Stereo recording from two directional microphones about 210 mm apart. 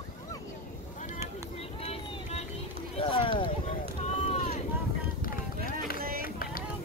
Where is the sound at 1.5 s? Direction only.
30° left (ahead or behind).